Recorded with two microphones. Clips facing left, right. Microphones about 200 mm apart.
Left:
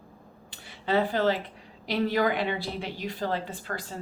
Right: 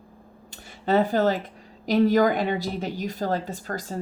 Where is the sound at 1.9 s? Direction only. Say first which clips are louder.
Right 6 dB; 45° right (ahead or behind).